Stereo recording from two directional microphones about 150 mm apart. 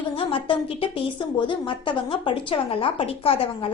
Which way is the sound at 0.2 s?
35° left (ahead or behind).